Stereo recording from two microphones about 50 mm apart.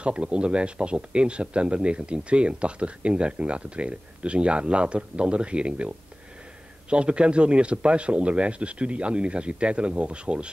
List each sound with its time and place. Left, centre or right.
0.0 s a man's voice: right